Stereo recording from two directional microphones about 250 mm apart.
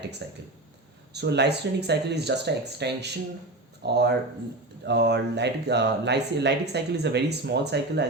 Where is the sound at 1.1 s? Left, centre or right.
Right.